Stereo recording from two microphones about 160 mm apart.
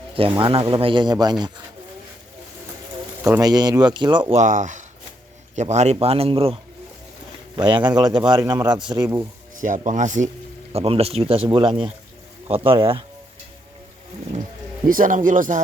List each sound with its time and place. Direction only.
0.3 s speech: 30° right (ahead or behind)
3.2 s speech: 20° right (ahead or behind)
4.4 s a man's voice: 50° right (ahead or behind); by 8.8 s 25° right (ahead or behind)
9.6 s speech: 55° right (ahead or behind)
10.7 s a man's voice: 40° right (ahead or behind)
14.8 s speech: 60° right (ahead or behind)